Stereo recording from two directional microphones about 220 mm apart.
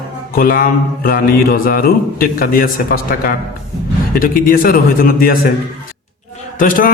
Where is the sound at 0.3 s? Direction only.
40° left (ahead or behind).